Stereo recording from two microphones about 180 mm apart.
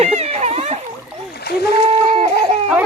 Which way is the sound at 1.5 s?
65° left (ahead or behind).